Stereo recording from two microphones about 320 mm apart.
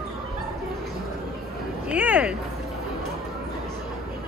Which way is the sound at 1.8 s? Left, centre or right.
Centre.